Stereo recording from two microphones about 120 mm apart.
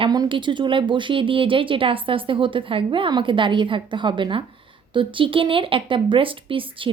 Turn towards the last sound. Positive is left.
turn(degrees=-45)  # may be behind; listen again after turning